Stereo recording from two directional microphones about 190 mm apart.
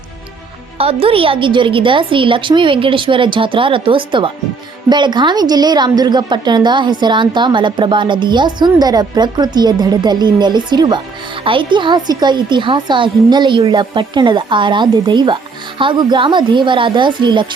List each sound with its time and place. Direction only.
0.8 s a woman's voice: 30° right (ahead or behind)